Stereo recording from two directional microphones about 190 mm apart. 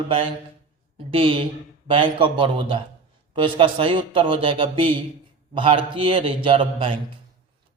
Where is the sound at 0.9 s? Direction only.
30° right (ahead or behind).